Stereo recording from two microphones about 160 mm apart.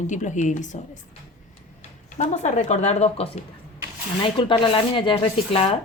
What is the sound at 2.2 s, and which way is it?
A woman's voice, 45° left (ahead or behind).